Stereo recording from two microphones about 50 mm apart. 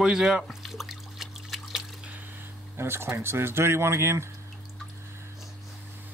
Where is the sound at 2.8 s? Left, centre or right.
Right.